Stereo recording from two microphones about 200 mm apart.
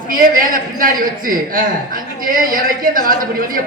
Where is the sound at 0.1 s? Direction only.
45° right (ahead or behind).